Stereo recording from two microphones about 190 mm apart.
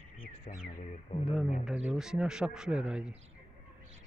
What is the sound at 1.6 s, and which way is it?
Speech, 5° right (ahead or behind).